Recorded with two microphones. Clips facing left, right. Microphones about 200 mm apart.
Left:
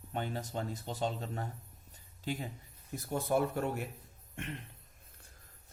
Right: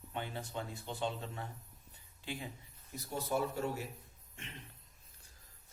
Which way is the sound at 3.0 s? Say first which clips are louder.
Left 4 dB; 50° left (ahead or behind).